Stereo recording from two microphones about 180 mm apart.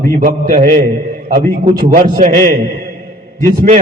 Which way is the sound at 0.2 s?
45° right (ahead or behind).